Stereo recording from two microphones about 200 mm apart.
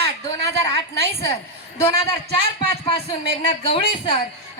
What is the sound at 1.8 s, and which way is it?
A man's voice, 25° left (ahead or behind).